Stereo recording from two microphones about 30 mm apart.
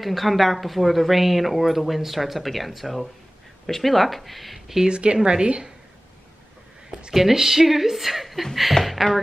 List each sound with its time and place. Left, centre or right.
0.0 s speech: centre
4.8 s a woman's voice: right
7.1 s speech: centre